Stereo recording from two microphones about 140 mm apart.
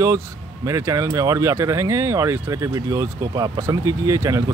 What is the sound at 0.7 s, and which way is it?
Speech, 25° right (ahead or behind).